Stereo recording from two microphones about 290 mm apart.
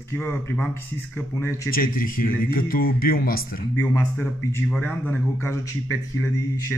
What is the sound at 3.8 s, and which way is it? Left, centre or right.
Speech, centre.